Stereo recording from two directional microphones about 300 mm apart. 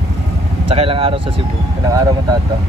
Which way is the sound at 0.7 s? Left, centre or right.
Centre.